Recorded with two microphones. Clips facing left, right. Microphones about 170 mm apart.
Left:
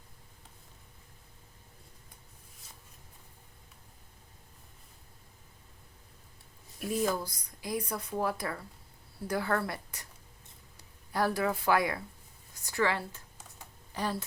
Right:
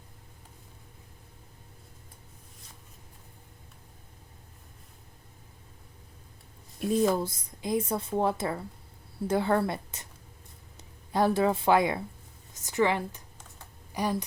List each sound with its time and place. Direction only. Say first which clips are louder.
6.7 s speech: right 6 dB; 25° right (ahead or behind)